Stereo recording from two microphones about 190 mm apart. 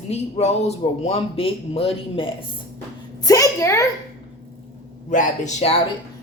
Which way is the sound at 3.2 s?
20° left (ahead or behind).